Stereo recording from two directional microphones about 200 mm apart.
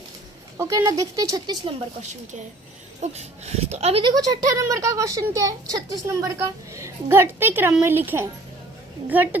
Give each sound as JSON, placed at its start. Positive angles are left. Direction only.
{"t": 0.5, "sound": "speech", "side_deg": -15}
{"t": 3.0, "sound": "speech", "side_deg": -35}